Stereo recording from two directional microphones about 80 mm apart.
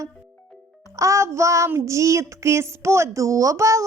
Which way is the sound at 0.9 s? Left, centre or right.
Right.